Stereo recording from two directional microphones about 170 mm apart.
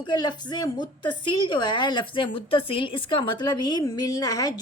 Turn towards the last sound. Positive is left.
turn(degrees=20)  # may be behind; listen again after turning